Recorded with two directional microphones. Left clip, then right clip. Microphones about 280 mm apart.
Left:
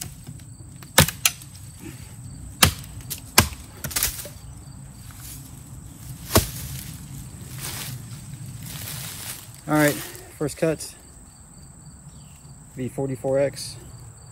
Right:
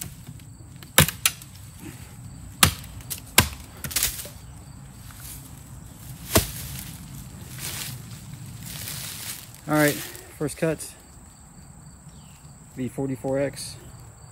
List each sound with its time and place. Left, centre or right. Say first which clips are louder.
0.7 s a sound: left 1 dB; centre
2.6 s typewriter: left 1 dB; centre
6.8 s boat: left 1 dB; centre
12.7 s speech: left 1 dB; centre